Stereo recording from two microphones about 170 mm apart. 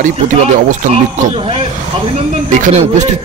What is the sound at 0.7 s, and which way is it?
Speech, 45° right (ahead or behind).